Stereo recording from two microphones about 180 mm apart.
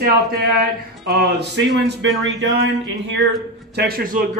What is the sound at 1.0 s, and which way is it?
Speech, 85° right.